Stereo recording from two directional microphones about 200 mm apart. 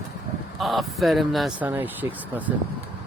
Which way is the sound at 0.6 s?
Centre (ahead or behind).